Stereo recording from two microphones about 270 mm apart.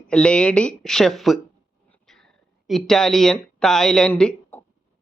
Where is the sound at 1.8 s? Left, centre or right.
Centre.